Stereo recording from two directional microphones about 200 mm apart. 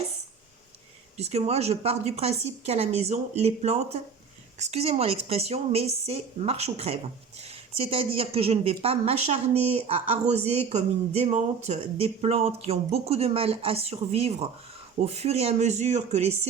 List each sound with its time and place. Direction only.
1.1 s a woman's voice: 30° right (ahead or behind)